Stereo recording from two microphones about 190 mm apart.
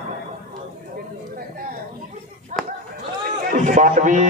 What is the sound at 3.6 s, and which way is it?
Speech, 40° right (ahead or behind).